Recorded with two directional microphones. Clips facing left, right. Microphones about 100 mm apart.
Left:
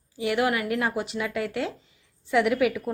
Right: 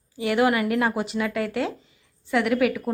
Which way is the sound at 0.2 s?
10° left (ahead or behind).